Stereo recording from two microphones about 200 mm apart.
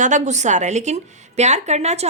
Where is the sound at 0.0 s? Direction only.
35° right (ahead or behind).